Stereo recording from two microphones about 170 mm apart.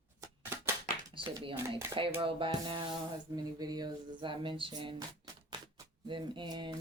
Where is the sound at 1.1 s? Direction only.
30° right (ahead or behind).